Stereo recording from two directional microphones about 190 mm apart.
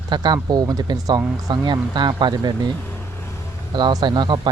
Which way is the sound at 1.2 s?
10° right (ahead or behind).